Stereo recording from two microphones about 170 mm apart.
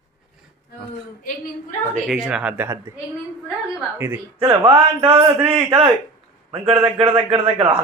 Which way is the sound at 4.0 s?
15° right (ahead or behind).